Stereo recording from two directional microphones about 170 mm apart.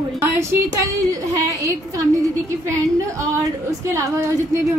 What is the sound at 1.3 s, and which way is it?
A woman's voice, 20° right (ahead or behind).